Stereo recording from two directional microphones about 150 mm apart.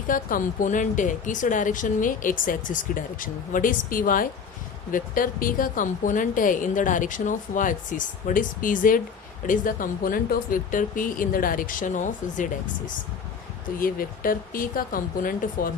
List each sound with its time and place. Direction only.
0.1 s speech: 65° left (ahead or behind)
13.7 s speech: 70° left (ahead or behind)